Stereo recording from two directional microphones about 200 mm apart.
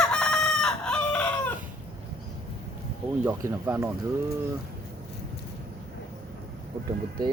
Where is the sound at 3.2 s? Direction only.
15° right (ahead or behind).